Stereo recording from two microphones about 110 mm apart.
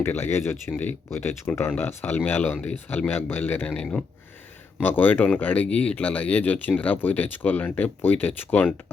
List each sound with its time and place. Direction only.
0.0 s speech: 20° left (ahead or behind)